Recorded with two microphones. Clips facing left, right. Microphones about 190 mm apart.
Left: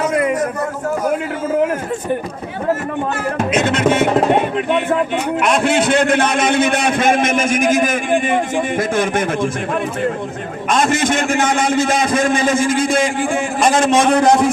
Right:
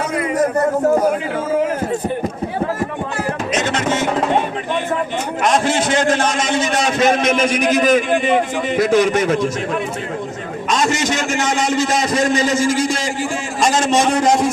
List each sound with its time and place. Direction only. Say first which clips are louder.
3.5 s music: left 5 dB; 60° left (ahead or behind)
5.4 s a man's voice: even; 60° left (ahead or behind)
10.7 s a sound: left 2 dB; 55° left (ahead or behind)
13.6 s a man's voice: left 1 dB; 55° left (ahead or behind)